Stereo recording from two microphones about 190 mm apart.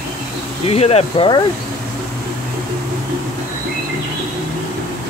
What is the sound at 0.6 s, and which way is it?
Speech, 35° left (ahead or behind).